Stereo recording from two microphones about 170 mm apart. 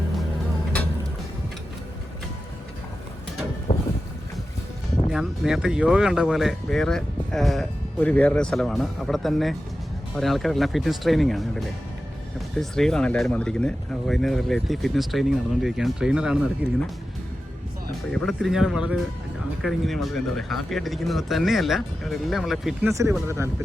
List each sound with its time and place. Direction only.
3.7 s boat: 50° left (ahead or behind)
5.0 s speech: centre (ahead or behind)
18.1 s speech: centre (ahead or behind)